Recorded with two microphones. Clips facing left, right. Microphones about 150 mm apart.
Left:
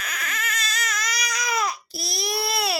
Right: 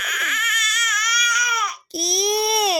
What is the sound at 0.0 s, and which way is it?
Baby cry, 30° left (ahead or behind).